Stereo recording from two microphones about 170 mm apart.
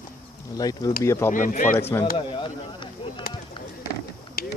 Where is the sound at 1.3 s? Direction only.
50° left (ahead or behind).